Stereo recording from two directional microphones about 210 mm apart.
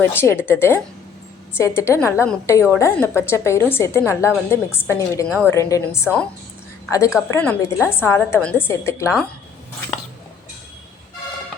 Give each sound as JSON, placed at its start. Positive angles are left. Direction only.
{"t": 0.0, "sound": "a woman's voice", "side_deg": 10}
{"t": 7.3, "sound": "a woman's voice", "side_deg": 5}